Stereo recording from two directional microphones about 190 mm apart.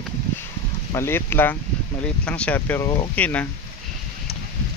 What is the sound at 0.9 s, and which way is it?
Speech, 10° left (ahead or behind).